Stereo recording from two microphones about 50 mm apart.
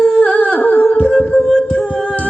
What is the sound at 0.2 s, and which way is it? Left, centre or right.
Humming, left.